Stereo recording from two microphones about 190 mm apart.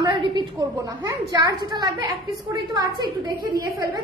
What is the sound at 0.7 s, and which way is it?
A woman's voice, 20° right (ahead or behind).